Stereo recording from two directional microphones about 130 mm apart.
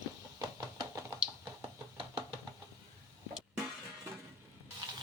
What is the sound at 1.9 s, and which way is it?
Knock, 45° right (ahead or behind).